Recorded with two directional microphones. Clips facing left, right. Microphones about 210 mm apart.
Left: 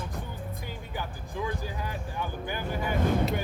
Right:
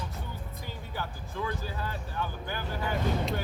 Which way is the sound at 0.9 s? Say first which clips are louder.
Left 1 dB; 15° left (ahead or behind).